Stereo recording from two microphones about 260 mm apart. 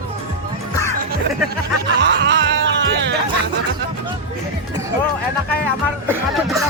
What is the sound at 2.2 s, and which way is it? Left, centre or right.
Music, right.